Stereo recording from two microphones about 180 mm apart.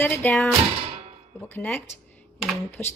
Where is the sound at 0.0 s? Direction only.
10° left (ahead or behind).